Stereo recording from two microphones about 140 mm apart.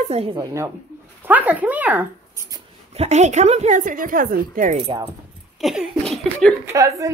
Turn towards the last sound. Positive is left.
turn(degrees=-25)  # may be behind; listen again after turning